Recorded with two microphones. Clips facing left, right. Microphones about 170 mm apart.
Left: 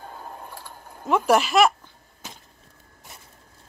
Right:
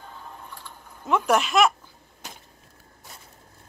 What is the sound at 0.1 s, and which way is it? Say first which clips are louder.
Sewing machine: left 3 dB; 40° left (ahead or behind).